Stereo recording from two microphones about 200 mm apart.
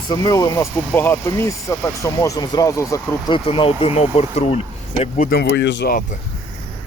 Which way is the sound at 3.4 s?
25° left (ahead or behind).